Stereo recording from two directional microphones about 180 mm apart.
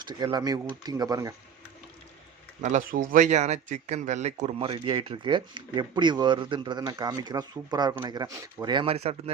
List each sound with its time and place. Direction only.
0.0 s speech: 25° right (ahead or behind)
2.6 s speech: 45° right (ahead or behind)